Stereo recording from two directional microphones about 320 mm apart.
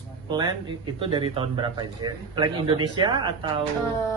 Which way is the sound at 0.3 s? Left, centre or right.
Centre.